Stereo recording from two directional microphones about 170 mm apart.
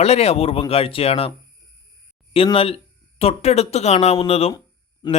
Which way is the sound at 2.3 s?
35° left (ahead or behind).